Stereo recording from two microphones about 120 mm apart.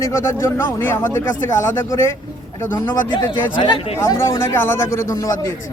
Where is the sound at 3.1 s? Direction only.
40° left (ahead or behind).